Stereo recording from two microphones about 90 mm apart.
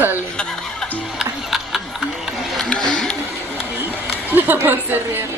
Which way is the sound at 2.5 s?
10° left (ahead or behind).